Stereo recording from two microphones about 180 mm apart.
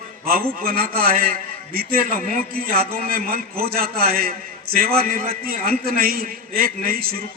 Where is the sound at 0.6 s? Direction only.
55° right (ahead or behind).